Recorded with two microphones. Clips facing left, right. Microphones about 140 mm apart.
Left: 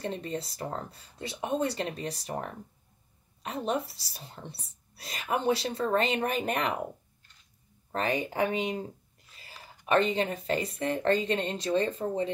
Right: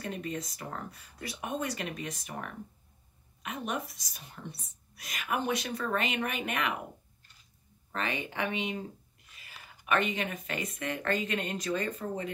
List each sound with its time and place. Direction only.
0.0 s speech: 30° left (ahead or behind)
7.9 s speech: 40° left (ahead or behind)